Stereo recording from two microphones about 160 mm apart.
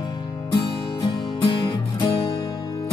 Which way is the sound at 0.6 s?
30° left (ahead or behind).